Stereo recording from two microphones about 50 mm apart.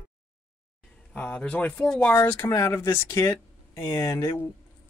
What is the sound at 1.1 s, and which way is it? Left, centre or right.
Speech, left.